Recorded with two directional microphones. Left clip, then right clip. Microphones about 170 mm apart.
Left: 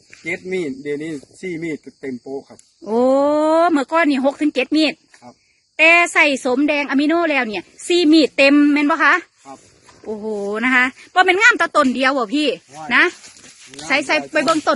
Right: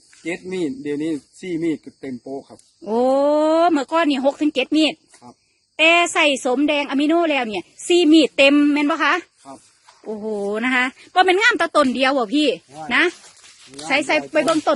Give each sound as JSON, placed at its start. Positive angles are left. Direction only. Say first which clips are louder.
{"t": 0.2, "sound": "speech", "louder": "left 2 dB", "side_deg": 20}
{"t": 1.0, "sound": "speech", "louder": "right 2 dB", "side_deg": 0}
{"t": 2.8, "sound": "a woman's voice", "louder": "left 2 dB", "side_deg": 15}
{"t": 14.4, "sound": "a woman's voice", "louder": "left 2 dB", "side_deg": 10}